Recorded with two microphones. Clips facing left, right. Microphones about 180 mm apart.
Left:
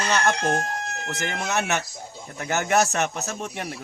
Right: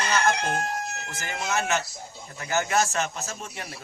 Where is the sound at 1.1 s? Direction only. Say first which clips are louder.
Left 4 dB; 75° left (ahead or behind).